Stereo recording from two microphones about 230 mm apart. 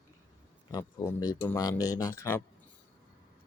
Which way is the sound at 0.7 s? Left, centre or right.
Centre.